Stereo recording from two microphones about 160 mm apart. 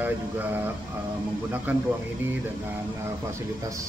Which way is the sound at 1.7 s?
10° right (ahead or behind).